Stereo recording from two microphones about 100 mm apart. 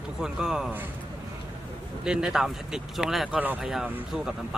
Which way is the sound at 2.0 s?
5° right (ahead or behind).